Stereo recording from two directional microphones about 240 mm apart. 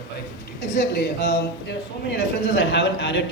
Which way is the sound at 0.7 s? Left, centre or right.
Left.